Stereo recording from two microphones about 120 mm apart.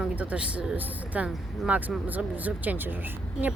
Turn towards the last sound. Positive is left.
turn(degrees=-15)  # may be behind; listen again after turning